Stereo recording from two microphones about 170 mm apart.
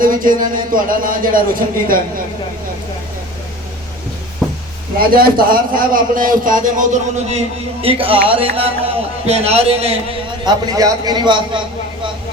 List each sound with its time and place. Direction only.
0.0 s a man's voice: 55° right (ahead or behind)
4.4 s a sound: centre (ahead or behind)
4.9 s a man's voice: 60° right (ahead or behind); by 9.9 s 35° right (ahead or behind)
10.4 s a man's voice: 20° right (ahead or behind)